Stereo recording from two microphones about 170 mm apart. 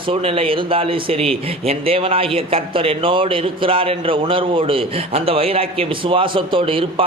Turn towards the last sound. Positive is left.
turn(degrees=-30)  # may be behind; listen again after turning